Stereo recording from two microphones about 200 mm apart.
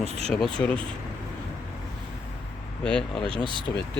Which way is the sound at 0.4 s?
5° left (ahead or behind).